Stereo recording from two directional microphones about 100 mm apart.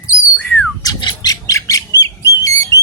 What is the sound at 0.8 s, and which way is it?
Squawk, 40° left (ahead or behind).